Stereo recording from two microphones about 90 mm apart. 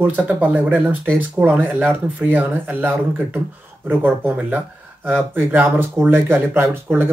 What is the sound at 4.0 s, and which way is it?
Speech, 20° right (ahead or behind).